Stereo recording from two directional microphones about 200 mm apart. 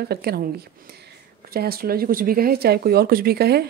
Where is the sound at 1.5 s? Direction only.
50° right (ahead or behind).